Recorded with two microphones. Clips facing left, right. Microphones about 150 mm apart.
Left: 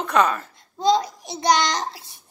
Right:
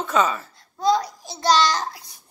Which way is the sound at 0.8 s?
25° left (ahead or behind).